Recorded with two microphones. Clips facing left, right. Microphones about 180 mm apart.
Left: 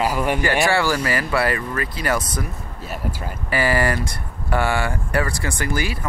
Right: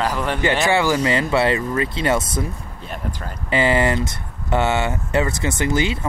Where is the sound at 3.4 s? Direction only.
20° right (ahead or behind).